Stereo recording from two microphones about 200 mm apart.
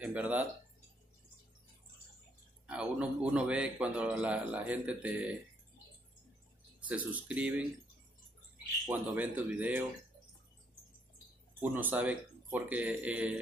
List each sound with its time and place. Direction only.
0.0 s speech: 10° right (ahead or behind)
2.6 s a man's voice: 5° right (ahead or behind)
6.9 s a man's voice: 5° right (ahead or behind)
8.8 s a man's voice: 10° right (ahead or behind)
11.6 s a man's voice: 10° right (ahead or behind)